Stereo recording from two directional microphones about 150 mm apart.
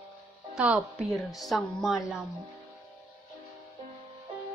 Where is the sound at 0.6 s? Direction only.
10° right (ahead or behind).